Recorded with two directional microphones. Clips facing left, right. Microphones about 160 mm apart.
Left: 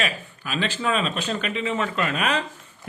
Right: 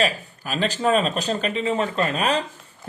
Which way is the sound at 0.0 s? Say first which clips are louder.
Right 5 dB; 40° right (ahead or behind).